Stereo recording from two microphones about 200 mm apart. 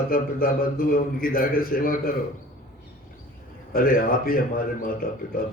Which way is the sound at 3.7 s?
45° left (ahead or behind).